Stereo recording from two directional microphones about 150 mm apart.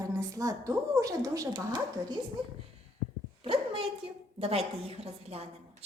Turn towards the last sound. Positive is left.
turn(degrees=-45)  # may be behind; listen again after turning